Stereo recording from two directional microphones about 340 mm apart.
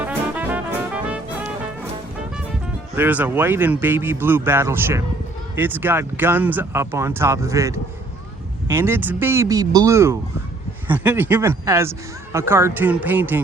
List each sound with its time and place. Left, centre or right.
0.0 s music: centre
2.9 s speech: centre